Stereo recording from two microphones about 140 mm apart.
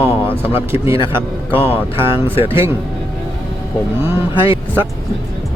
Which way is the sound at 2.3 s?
40° left (ahead or behind).